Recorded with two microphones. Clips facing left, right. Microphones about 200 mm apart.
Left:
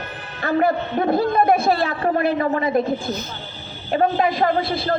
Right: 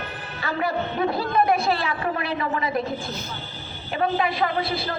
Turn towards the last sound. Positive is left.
turn(degrees=45)  # may be behind; listen again after turning